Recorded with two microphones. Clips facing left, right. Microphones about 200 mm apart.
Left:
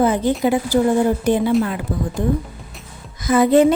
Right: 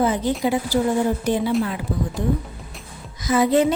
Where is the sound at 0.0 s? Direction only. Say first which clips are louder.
Left 4 dB; 55° left (ahead or behind).